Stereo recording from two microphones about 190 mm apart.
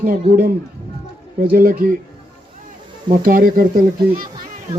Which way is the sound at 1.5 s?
50° right (ahead or behind).